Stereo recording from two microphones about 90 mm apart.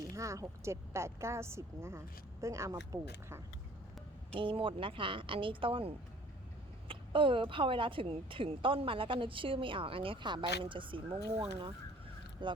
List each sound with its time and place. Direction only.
0.0 s speech: 35° right (ahead or behind)
4.3 s a woman's voice: 80° right
12.4 s speech: 65° right (ahead or behind)